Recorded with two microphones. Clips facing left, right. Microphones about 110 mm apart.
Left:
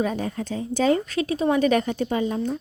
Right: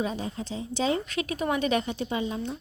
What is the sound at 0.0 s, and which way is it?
A woman's voice, 55° left (ahead or behind).